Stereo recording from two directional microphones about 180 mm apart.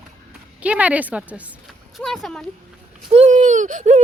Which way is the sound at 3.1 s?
40° right (ahead or behind).